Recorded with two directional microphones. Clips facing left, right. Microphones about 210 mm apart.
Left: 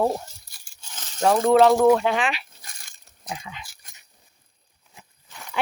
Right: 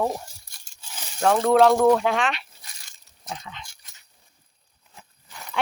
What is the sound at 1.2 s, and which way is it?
Speech, centre (ahead or behind).